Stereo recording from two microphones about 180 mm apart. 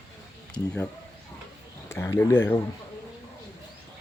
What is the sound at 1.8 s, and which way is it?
Speech, 15° left (ahead or behind).